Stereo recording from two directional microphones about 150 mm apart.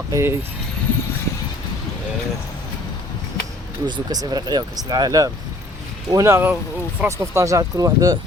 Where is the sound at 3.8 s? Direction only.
30° right (ahead or behind).